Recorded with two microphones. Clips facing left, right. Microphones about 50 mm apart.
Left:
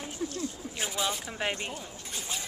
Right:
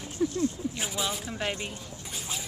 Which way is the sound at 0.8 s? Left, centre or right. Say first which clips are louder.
Even; centre.